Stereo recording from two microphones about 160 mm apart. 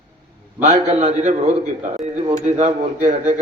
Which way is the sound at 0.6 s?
45° right (ahead or behind).